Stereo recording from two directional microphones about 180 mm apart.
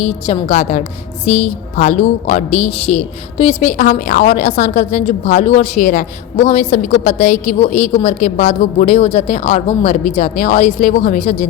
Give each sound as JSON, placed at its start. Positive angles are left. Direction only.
{"t": 0.0, "sound": "a woman's voice", "side_deg": 35}